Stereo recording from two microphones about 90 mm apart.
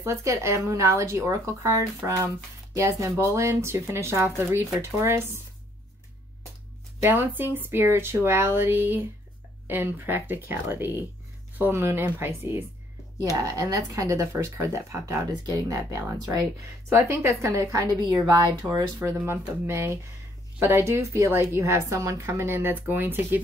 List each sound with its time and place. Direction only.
0.0 s a woman's voice: 35° right (ahead or behind)
7.0 s a woman's voice: 25° right (ahead or behind)
13.4 s speech: 40° right (ahead or behind)
16.9 s speech: 30° right (ahead or behind)
18.0 s speech: 45° right (ahead or behind)
19.2 s a woman's voice: 30° right (ahead or behind)